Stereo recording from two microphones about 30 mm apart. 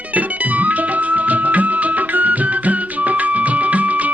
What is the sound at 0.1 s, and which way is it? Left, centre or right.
Music, right.